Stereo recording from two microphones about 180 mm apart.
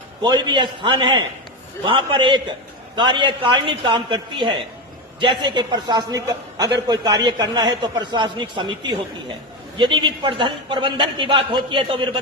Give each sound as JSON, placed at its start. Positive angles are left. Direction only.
{"t": 0.2, "sound": "a man's voice", "side_deg": -25}